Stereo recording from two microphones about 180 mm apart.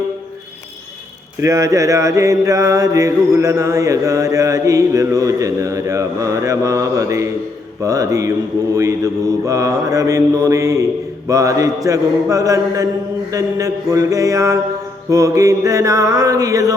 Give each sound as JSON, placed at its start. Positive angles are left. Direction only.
{"t": 1.4, "sound": "mantra", "side_deg": -15}